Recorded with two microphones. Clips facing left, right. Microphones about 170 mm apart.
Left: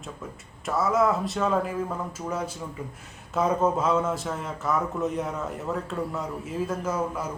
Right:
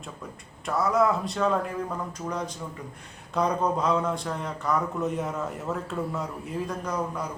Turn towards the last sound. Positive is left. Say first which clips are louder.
# left 2 dB
turn(degrees=5)  # may be behind; listen again after turning